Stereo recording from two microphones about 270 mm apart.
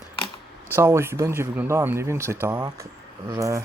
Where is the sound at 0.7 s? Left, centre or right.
Centre.